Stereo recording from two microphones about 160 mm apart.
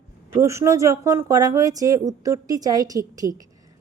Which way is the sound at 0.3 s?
15° right (ahead or behind).